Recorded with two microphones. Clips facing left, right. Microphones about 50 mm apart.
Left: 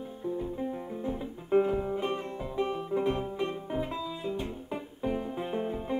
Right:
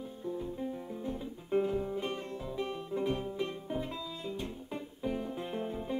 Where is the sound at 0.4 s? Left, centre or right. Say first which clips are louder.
Left 4 dB; centre.